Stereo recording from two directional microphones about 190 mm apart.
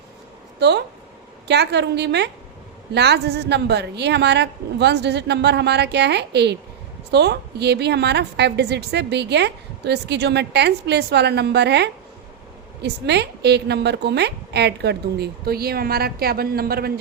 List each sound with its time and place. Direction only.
0.6 s a woman's voice: 65° right (ahead or behind)